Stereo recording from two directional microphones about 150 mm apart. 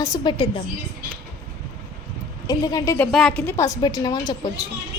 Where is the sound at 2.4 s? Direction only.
25° left (ahead or behind).